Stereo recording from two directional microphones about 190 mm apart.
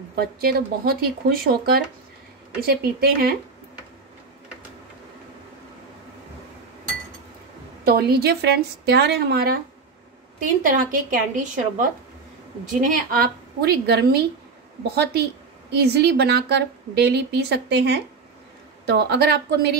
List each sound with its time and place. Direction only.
0.1 s speech: 55° right (ahead or behind)
7.8 s a woman's voice: 55° right (ahead or behind)
12.8 s a woman's voice: 50° right (ahead or behind)